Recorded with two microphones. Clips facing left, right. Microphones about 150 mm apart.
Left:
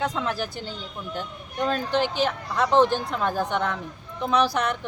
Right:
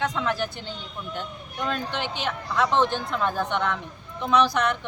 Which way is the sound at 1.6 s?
35° left (ahead or behind).